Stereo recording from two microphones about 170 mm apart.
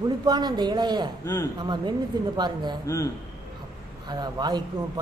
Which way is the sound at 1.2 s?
15° left (ahead or behind).